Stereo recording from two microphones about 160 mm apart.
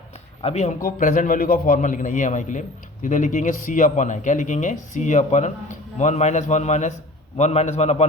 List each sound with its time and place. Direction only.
0.4 s a man's voice: 45° left (ahead or behind)